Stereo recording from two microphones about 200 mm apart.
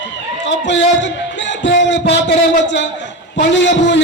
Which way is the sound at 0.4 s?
65° left (ahead or behind).